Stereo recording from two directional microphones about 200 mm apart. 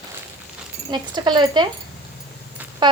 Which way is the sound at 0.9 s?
20° right (ahead or behind).